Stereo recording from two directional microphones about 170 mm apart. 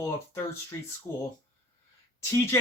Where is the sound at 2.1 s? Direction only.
15° left (ahead or behind).